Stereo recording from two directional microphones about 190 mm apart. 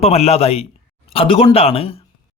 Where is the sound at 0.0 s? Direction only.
35° left (ahead or behind).